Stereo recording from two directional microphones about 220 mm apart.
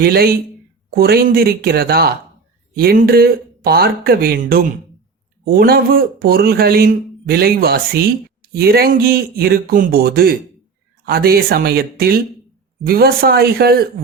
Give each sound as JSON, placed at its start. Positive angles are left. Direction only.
{"t": 0.0, "sound": "speech", "side_deg": -45}